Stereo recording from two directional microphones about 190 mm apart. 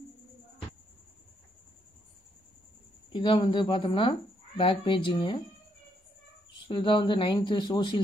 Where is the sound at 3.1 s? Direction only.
25° left (ahead or behind).